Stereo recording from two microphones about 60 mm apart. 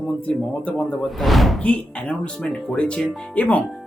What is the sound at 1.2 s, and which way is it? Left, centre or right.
Speech, centre.